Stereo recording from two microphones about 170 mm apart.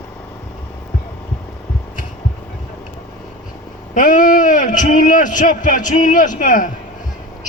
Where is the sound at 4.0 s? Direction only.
50° left (ahead or behind).